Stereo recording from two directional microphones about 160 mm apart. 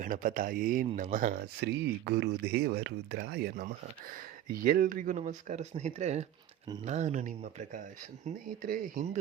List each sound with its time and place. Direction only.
0.0 s speech: 60° right (ahead or behind)
1.6 s speech: 90° right; by 7.8 s 50° right (ahead or behind)
8.2 s speech: 60° right (ahead or behind)